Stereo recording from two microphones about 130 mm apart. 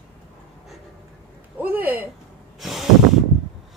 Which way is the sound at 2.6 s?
Centre (ahead or behind).